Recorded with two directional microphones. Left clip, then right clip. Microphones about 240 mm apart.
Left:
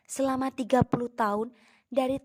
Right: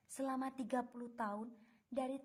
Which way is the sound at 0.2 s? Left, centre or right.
Left.